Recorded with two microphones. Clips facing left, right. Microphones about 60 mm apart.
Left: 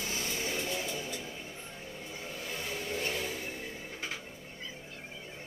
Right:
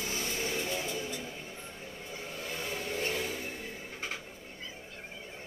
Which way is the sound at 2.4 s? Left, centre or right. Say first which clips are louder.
Right 1 dB; right.